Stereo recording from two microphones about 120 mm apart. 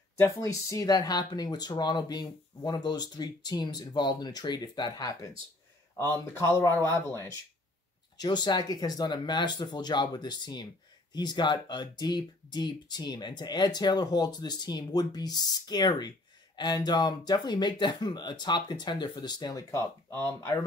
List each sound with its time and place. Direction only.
0.2 s speech: 25° left (ahead or behind)
5.9 s speech: 25° left (ahead or behind)
8.2 s speech: 35° left (ahead or behind)
20.1 s speech: 15° left (ahead or behind)